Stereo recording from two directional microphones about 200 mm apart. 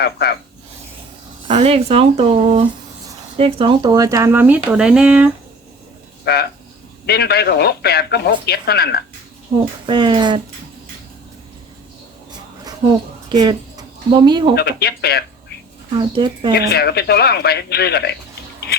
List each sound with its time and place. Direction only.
0.0 s speech: 55° left (ahead or behind)
1.5 s speech: 30° right (ahead or behind); by 5.3 s 5° right (ahead or behind)
6.3 s speech: 55° left (ahead or behind)
9.8 s speech: 25° right (ahead or behind)
13.3 s speech: 20° right (ahead or behind)
14.5 s speech: 55° left (ahead or behind)
16.0 s speech: 25° right (ahead or behind)
16.5 s speech: 55° left (ahead or behind)